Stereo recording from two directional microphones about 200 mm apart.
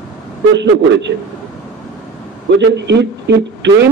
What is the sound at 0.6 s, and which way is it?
Speech, 60° right (ahead or behind).